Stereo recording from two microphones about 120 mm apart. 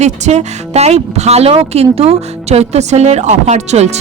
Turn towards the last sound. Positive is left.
turn(degrees=-65)  # may be behind; listen again after turning